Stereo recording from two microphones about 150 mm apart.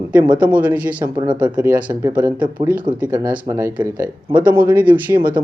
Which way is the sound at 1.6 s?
15° right (ahead or behind).